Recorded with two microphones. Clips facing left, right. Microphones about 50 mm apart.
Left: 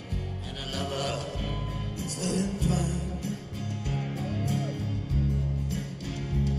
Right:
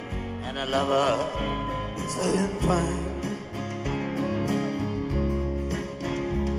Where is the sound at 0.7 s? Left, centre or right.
Right.